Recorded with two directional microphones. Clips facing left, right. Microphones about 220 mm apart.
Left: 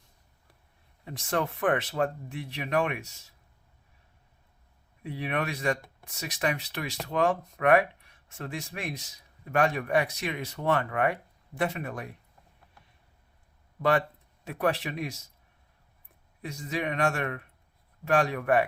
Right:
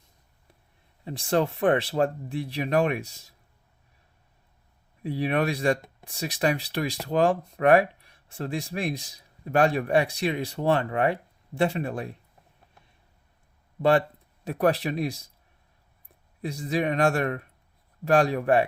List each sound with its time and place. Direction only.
1.0 s speech: 30° right (ahead or behind)
5.0 s speech: 35° right (ahead or behind)
14.4 s speech: 40° right (ahead or behind)
16.4 s speech: 35° right (ahead or behind)